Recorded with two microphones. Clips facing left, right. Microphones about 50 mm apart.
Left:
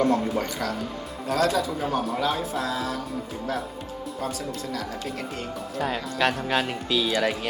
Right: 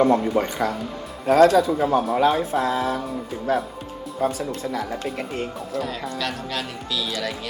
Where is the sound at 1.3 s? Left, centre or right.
Right.